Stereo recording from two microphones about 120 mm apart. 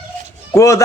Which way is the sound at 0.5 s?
25° left (ahead or behind).